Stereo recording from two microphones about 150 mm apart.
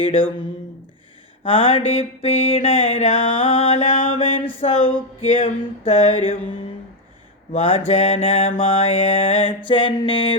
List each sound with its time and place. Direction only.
0.0 s mantra: 35° left (ahead or behind)
1.5 s mantra: 40° left (ahead or behind)
7.5 s mantra: 40° left (ahead or behind)